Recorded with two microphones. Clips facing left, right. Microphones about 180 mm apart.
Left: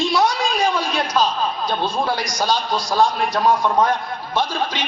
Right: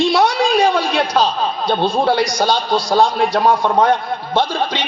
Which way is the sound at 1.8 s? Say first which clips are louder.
Right 8 dB; 30° right (ahead or behind).